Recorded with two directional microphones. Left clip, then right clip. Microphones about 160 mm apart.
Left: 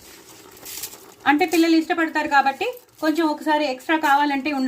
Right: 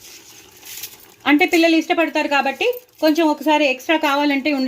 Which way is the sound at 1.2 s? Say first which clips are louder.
Right 3 dB; 55° right (ahead or behind).